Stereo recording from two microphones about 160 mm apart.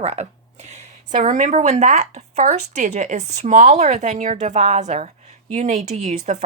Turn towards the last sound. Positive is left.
turn(degrees=-45)  # may be behind; listen again after turning